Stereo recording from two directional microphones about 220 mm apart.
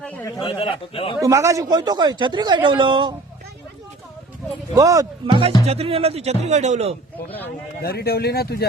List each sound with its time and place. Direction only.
0.3 s a man's voice: 25° left (ahead or behind)
1.2 s a man's voice: 15° right (ahead or behind)
4.7 s a man's voice: 15° right (ahead or behind); by 6.9 s 30° right (ahead or behind)
7.8 s speech: 45° left (ahead or behind)